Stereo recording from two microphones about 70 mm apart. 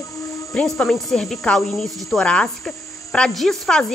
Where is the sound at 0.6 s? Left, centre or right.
Centre.